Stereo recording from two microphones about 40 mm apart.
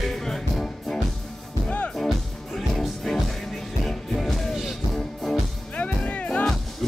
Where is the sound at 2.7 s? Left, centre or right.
Centre.